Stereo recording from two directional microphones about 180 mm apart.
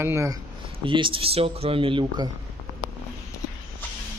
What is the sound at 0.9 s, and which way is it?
Speech, 30° right (ahead or behind).